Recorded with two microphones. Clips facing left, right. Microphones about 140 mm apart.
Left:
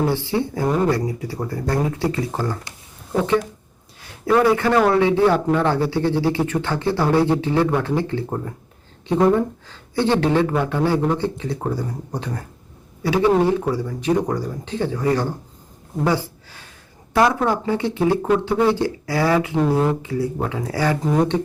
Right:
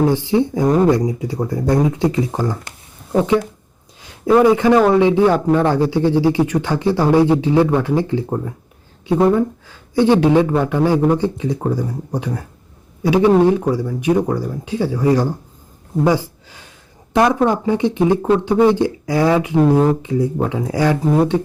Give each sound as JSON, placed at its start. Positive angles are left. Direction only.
{"t": 0.0, "sound": "speech", "side_deg": -15}
{"t": 4.0, "sound": "a man's voice", "side_deg": -15}
{"t": 16.0, "sound": "a sound", "side_deg": -15}
{"t": 17.2, "sound": "speech", "side_deg": -20}